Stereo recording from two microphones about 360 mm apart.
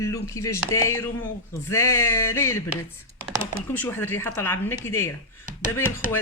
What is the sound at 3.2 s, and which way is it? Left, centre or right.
Speech, centre.